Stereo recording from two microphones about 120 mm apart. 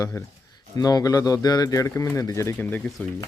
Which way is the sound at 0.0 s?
25° left (ahead or behind).